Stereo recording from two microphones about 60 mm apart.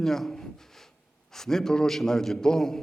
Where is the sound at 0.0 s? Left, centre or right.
Centre.